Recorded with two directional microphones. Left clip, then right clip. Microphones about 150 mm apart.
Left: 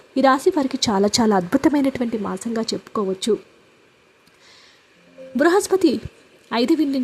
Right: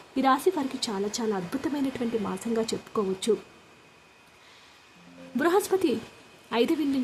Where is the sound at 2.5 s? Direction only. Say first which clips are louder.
Left 2 dB; 35° left (ahead or behind).